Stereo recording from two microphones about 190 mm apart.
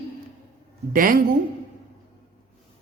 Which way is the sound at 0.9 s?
50° right (ahead or behind).